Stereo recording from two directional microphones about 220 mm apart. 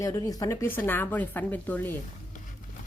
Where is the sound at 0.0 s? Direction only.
15° left (ahead or behind).